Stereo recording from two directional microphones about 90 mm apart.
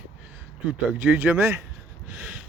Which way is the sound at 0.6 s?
15° right (ahead or behind).